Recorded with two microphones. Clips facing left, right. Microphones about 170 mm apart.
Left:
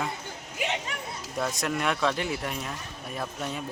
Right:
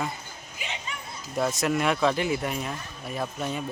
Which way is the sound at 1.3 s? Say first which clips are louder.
Right 4 dB; 5° right (ahead or behind).